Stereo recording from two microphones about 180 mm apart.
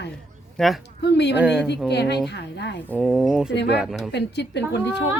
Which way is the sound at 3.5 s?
70° left (ahead or behind).